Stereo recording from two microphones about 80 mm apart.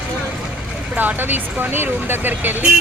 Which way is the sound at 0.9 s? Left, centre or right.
Centre.